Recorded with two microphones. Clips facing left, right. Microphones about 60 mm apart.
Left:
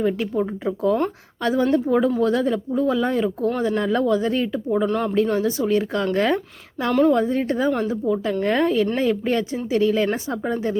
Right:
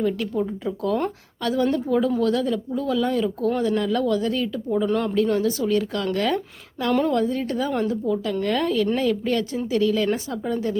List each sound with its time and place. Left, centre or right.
0.0 s speech: left
4.9 s speech: centre
5.3 s speech: left